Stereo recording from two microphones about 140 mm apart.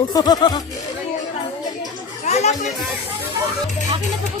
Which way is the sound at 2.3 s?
55° left (ahead or behind).